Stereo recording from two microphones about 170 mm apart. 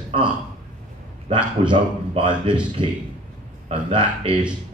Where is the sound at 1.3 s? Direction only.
30° right (ahead or behind).